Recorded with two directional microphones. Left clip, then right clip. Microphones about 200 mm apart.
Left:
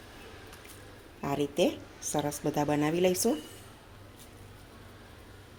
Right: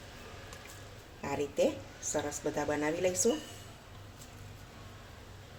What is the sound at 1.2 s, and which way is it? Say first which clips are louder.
Speech: left 2 dB; 40° left (ahead or behind).